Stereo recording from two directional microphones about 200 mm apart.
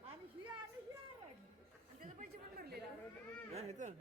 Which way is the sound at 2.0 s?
45° right (ahead or behind).